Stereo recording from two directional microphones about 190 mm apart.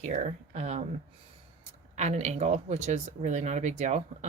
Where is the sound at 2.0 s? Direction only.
35° right (ahead or behind).